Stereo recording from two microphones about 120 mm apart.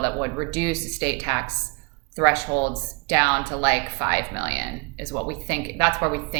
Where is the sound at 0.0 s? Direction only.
20° right (ahead or behind).